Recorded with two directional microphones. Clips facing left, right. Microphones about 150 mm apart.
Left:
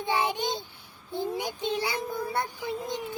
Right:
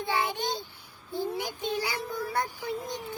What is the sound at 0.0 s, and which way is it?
Child singing, 20° left (ahead or behind).